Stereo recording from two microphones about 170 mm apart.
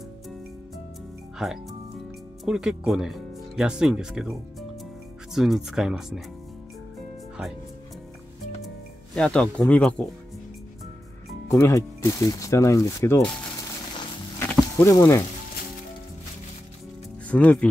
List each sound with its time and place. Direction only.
1.4 s speech: centre (ahead or behind)
5.3 s speech: centre (ahead or behind)
9.1 s speech: 5° left (ahead or behind)
11.5 s speech: 20° left (ahead or behind)
14.5 s a sound: 15° left (ahead or behind)
17.3 s speech: 10° left (ahead or behind)